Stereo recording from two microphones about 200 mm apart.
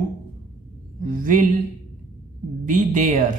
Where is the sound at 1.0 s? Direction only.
45° right (ahead or behind).